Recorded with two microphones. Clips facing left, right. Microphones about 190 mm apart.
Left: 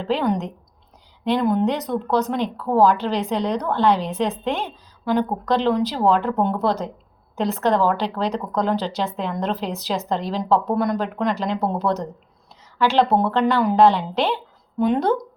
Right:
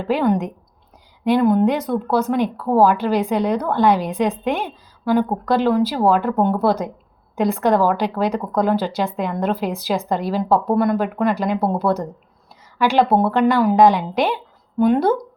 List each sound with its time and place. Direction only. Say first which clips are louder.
0.0 s speech: right 3 dB; 10° right (ahead or behind)